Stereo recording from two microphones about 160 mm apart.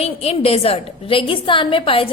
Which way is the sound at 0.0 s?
40° left (ahead or behind).